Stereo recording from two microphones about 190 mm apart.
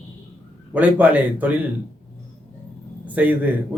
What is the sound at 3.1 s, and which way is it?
Speech, 10° right (ahead or behind).